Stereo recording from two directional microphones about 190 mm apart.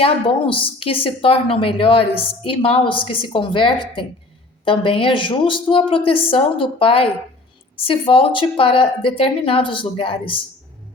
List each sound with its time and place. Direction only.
0.0 s a woman's voice: 30° left (ahead or behind)